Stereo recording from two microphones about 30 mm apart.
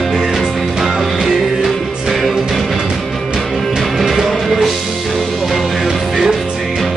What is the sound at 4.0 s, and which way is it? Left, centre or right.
Music, centre.